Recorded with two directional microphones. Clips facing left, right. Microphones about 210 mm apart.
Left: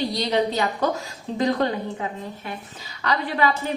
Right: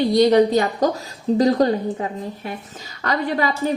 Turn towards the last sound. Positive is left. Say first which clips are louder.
# right 3 dB
turn(degrees=-40)  # may be behind; listen again after turning